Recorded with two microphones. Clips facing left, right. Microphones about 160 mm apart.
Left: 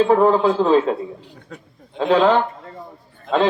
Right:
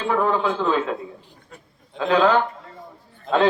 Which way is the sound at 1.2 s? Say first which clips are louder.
Left 8 dB; 80° left.